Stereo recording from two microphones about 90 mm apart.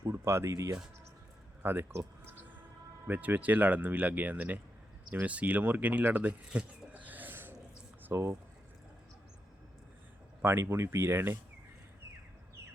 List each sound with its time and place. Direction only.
0.0 s speech: 30° right (ahead or behind)
8.0 s speech: 30° right (ahead or behind)
10.4 s speech: 25° right (ahead or behind)